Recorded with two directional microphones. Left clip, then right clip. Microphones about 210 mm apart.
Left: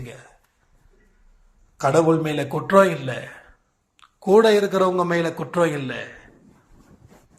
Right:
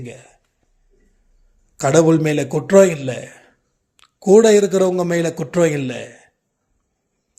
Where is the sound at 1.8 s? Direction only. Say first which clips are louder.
Right 4 dB; 55° right (ahead or behind).